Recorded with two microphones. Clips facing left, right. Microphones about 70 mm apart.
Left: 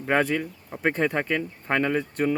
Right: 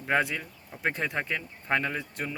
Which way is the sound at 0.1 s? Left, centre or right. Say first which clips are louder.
Left 4 dB; left.